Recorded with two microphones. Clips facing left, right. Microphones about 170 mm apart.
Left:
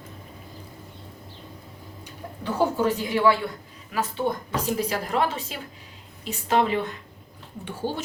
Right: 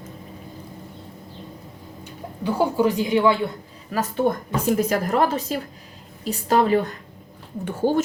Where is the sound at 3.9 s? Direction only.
50° right (ahead or behind).